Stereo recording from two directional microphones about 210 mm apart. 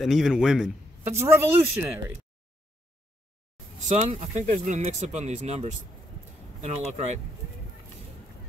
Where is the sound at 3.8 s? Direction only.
35° right (ahead or behind).